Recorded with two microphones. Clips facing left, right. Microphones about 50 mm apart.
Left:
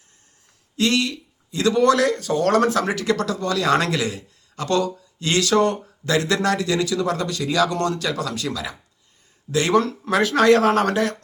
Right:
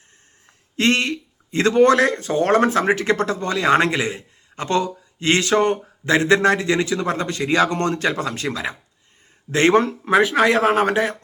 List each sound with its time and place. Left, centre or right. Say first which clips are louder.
0.8 s speech: right 2 dB; right